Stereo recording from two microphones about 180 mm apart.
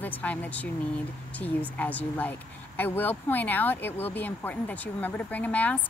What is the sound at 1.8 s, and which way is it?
Speech, 10° left (ahead or behind).